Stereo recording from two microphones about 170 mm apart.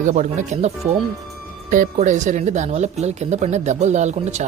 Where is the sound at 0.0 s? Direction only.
45° right (ahead or behind).